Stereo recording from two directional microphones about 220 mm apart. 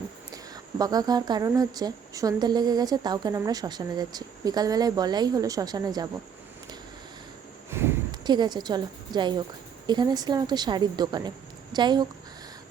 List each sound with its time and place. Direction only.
0.3 s speech: 15° right (ahead or behind)
7.7 s a sound: 10° right (ahead or behind)
9.8 s speech: 20° right (ahead or behind)